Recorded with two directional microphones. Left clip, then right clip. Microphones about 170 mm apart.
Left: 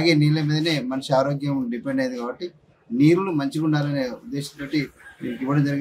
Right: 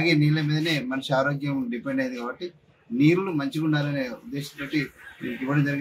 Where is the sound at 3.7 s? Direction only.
35° left (ahead or behind).